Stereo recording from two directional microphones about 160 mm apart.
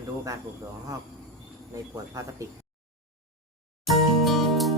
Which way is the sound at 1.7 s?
20° right (ahead or behind).